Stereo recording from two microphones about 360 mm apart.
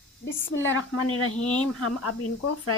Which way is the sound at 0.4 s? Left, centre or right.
Left.